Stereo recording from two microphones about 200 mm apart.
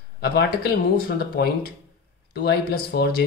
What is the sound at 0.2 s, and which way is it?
Speech, 55° left (ahead or behind).